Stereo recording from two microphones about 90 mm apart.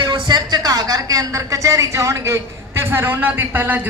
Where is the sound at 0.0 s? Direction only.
60° right (ahead or behind).